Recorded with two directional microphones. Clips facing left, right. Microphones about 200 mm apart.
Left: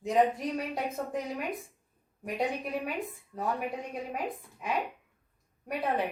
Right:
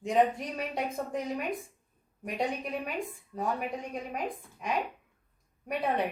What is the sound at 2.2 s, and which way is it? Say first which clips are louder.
Speech: left 1 dB; 5° left (ahead or behind).